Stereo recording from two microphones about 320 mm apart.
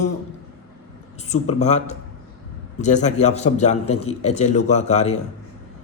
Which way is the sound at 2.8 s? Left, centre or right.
Left.